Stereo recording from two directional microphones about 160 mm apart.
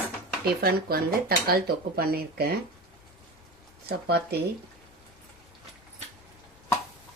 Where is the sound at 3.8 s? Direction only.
90° right.